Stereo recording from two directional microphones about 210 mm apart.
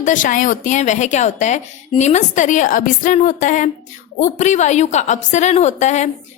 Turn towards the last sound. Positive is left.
turn(degrees=35)  # may be behind; listen again after turning